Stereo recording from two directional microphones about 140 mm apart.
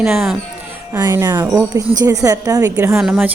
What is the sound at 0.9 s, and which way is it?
Speech, 25° right (ahead or behind).